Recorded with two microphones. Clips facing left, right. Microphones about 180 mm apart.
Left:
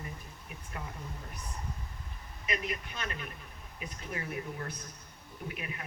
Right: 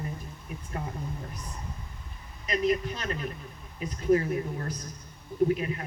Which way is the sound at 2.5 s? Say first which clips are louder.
Right 10 dB; 35° right (ahead or behind).